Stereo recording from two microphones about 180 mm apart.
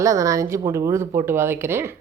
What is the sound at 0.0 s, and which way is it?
Speech, 15° right (ahead or behind).